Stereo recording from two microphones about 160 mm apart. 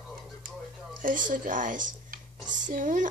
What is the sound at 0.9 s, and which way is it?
Speech, 55° right (ahead or behind).